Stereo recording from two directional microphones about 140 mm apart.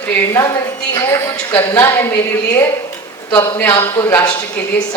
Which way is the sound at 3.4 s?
20° left (ahead or behind).